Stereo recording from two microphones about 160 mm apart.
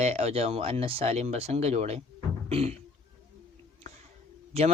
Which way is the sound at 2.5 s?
40° right (ahead or behind).